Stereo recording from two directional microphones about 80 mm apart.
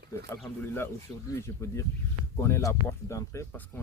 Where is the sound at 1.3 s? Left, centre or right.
Left.